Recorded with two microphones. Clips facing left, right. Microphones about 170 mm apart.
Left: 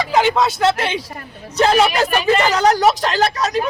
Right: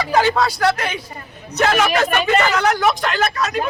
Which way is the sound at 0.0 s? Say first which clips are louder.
Left 1 dB; 20° left (ahead or behind).